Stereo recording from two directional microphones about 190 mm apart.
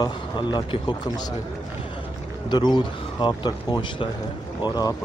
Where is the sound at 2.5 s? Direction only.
25° left (ahead or behind).